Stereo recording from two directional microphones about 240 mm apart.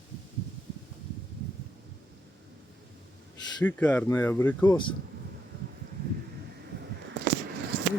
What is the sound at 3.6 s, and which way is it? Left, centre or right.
Speech, centre.